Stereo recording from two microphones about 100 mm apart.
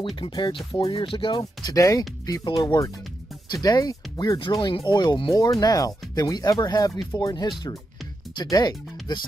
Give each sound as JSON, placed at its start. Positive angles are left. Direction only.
{"t": 0.2, "sound": "speech", "side_deg": 55}
{"t": 1.4, "sound": "speech", "side_deg": 35}
{"t": 4.4, "sound": "speech", "side_deg": 50}
{"t": 5.3, "sound": "speech", "side_deg": 40}